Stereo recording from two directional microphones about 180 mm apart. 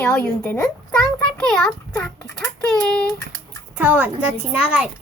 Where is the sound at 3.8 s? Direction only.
10° right (ahead or behind).